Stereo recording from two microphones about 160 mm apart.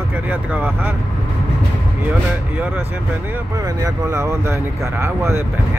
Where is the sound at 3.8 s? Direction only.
15° right (ahead or behind).